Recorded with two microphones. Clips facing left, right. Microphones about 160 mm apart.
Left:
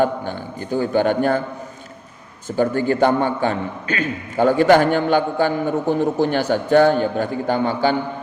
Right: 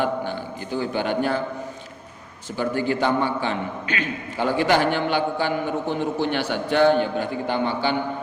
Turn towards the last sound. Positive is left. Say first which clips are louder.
# left 4 dB
turn(degrees=45)  # may be behind; listen again after turning